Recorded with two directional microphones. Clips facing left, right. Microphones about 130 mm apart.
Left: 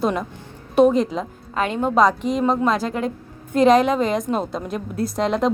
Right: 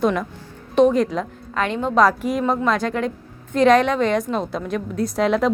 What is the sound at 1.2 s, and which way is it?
Speech, 30° left (ahead or behind).